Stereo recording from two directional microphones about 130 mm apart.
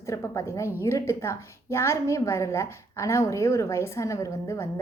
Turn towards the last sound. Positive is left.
turn(degrees=20)  # may be behind; listen again after turning